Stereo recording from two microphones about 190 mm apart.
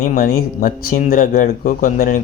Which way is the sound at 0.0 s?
45° left (ahead or behind).